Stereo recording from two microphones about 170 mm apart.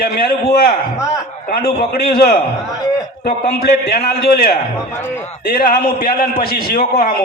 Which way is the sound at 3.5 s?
70° left (ahead or behind).